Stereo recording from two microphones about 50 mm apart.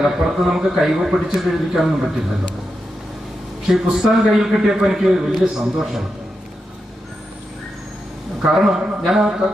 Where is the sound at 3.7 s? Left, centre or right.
Centre.